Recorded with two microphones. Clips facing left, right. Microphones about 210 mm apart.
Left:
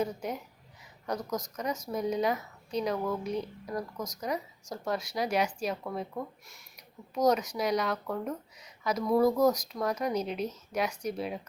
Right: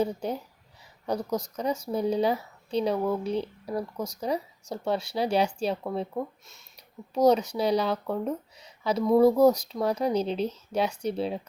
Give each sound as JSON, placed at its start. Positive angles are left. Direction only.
{"t": 0.0, "sound": "speech", "side_deg": -30}
{"t": 7.1, "sound": "speech", "side_deg": -30}